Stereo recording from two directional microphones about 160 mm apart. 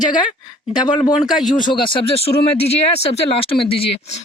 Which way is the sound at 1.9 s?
35° left (ahead or behind).